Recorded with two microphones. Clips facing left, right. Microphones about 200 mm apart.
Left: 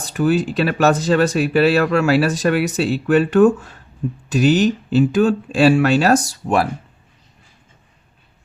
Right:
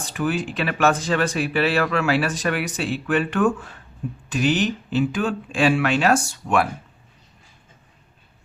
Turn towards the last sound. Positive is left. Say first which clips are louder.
# left 3 dB
turn(degrees=35)  # may be behind; listen again after turning